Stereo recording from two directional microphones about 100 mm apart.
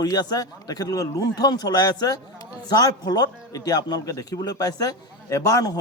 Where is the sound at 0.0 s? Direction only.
40° left (ahead or behind).